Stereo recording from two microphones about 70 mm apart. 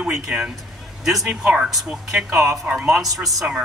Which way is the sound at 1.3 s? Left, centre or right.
Centre.